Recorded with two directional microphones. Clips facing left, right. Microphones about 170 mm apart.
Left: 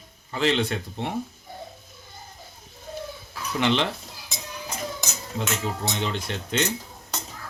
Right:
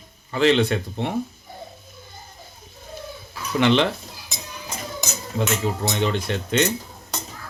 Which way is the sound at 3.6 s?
65° right (ahead or behind).